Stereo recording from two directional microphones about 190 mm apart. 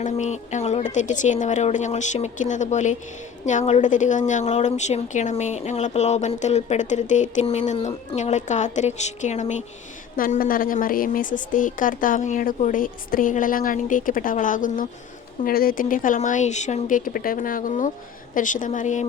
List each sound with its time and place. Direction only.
0.0 s a woman's voice: 40° left (ahead or behind)